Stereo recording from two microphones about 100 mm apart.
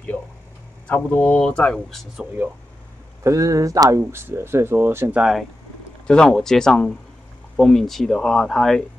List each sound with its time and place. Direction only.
0.8 s speech: 15° left (ahead or behind)
3.3 s speech: 35° right (ahead or behind)
4.0 s speech: 25° right (ahead or behind)
5.1 s speech: 5° right (ahead or behind)
6.0 s speech: 5° left (ahead or behind)